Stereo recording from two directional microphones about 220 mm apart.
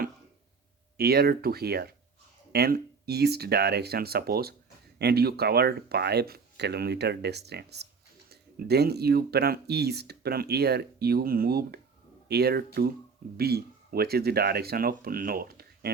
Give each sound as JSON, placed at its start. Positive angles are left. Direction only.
{"t": 0.9, "sound": "speech", "side_deg": -45}